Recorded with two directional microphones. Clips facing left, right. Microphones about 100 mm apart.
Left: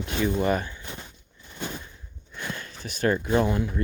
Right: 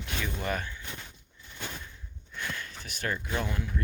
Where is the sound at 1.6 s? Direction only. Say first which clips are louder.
Left 6 dB; 20° left (ahead or behind).